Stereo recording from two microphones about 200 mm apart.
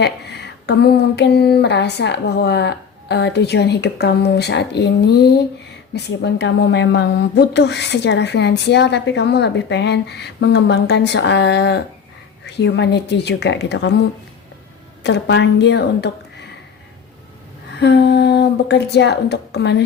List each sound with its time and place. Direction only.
0.0 s speech: 55° left (ahead or behind)
15.0 s speech: 60° left (ahead or behind)
17.7 s speech: 60° left (ahead or behind)